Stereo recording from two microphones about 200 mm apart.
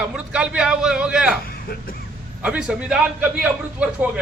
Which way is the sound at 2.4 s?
5° right (ahead or behind).